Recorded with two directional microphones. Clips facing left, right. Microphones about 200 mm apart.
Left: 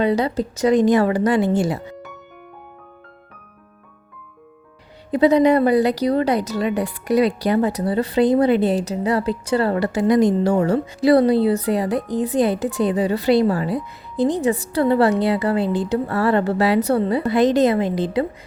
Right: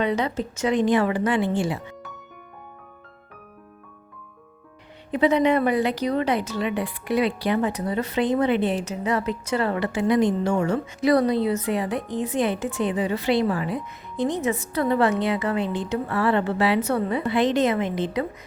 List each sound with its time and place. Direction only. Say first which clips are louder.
0.0 s speech: left 5 dB; 35° left (ahead or behind)
5.1 s speech: left 5 dB; 35° left (ahead or behind)